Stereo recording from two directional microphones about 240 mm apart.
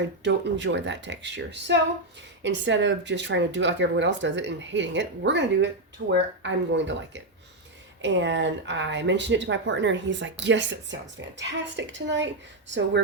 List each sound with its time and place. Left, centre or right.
0.0 s speech: right